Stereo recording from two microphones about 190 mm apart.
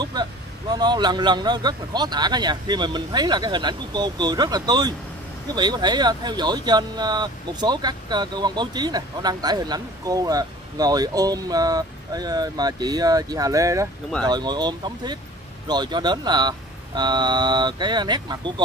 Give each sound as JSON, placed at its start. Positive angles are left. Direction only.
{"t": 0.0, "sound": "speech", "side_deg": -20}